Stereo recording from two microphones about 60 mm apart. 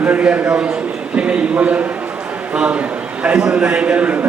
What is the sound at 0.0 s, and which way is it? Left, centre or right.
A man's voice, right.